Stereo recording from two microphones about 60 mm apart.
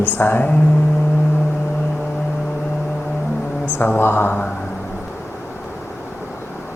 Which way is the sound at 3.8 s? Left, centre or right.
Left.